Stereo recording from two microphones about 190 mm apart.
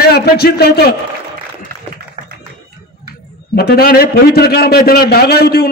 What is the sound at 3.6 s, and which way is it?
A man's voice, 55° left (ahead or behind).